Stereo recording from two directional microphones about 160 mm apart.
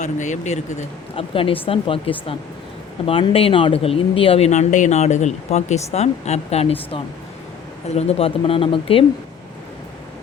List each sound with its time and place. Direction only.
0.0 s speech: 50° left (ahead or behind)